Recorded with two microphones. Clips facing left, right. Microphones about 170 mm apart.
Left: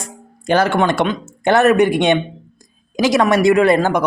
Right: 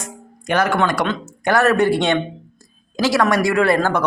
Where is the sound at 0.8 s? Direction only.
20° left (ahead or behind).